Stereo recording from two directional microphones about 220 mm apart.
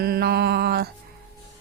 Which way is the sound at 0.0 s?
45° right (ahead or behind).